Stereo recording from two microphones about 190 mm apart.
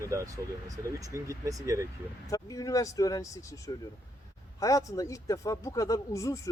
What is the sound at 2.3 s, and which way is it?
Speech, 15° left (ahead or behind).